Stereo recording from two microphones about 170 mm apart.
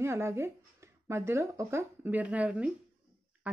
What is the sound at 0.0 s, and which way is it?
Speech, 15° right (ahead or behind).